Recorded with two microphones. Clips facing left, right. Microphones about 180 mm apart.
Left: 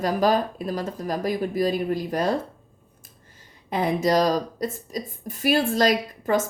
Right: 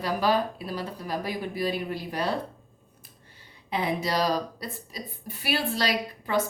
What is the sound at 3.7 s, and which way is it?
A woman's voice, 45° left (ahead or behind).